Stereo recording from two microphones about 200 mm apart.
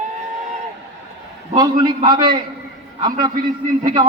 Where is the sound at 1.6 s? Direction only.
20° right (ahead or behind).